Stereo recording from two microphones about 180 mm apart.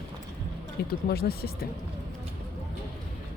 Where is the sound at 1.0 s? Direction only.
60° left (ahead or behind).